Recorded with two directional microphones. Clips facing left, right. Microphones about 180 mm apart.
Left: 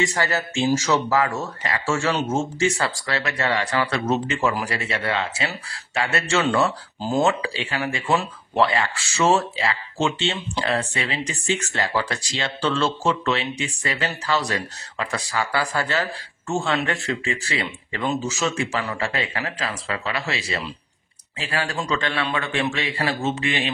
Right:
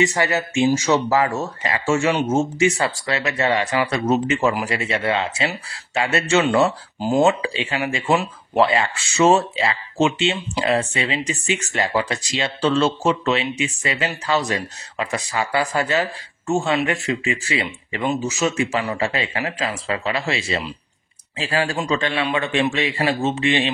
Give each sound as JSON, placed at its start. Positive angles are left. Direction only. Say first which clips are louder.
{"t": 0.0, "sound": "speech", "louder": "right 4 dB", "side_deg": -15}
{"t": 3.3, "sound": "speech", "louder": "right 3 dB", "side_deg": -20}